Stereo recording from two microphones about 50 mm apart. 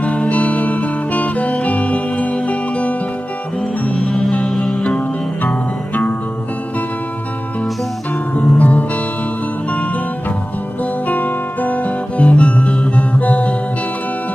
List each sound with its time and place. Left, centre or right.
0.0 s music: left
3.9 s music: centre
4.9 s music: left
8.4 s music: left
11.0 s guitar: left
13.2 s music: left